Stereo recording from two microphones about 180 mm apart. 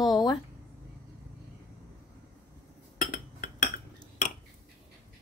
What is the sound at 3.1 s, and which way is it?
Chink, 45° left (ahead or behind).